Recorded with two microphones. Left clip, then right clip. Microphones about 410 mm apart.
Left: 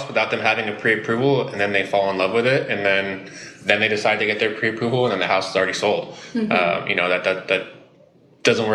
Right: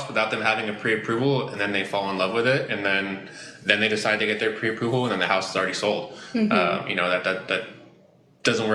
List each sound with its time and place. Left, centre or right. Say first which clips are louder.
0.1 s speech: left 3 dB; left